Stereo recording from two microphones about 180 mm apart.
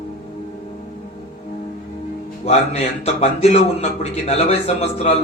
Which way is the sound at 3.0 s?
35° left (ahead or behind).